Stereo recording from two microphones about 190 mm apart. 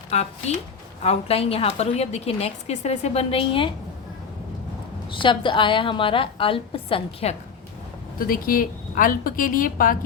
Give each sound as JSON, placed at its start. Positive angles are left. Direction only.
{"t": 0.1, "sound": "a woman's voice", "side_deg": 35}
{"t": 5.2, "sound": "a woman's voice", "side_deg": 25}
{"t": 8.2, "sound": "a woman's voice", "side_deg": 50}